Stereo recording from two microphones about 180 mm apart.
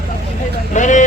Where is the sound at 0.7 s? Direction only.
45° left (ahead or behind).